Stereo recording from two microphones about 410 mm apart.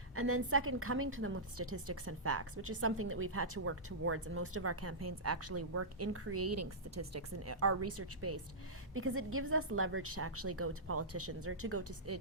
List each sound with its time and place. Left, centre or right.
0.2 s a woman's voice: right